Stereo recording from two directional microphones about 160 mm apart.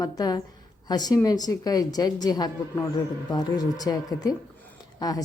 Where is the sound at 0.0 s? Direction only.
25° left (ahead or behind).